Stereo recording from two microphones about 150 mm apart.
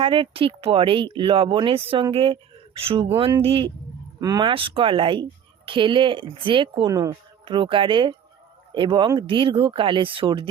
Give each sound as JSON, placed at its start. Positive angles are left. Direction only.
{"t": 0.0, "sound": "speech", "side_deg": -35}
{"t": 4.2, "sound": "speech", "side_deg": -25}